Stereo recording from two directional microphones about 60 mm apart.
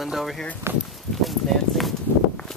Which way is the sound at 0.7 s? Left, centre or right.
Right.